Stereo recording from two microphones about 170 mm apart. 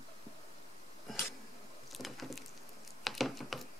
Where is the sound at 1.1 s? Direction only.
Centre (ahead or behind).